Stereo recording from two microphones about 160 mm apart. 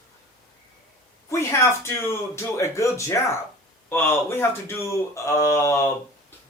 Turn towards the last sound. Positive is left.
turn(degrees=15)  # may be behind; listen again after turning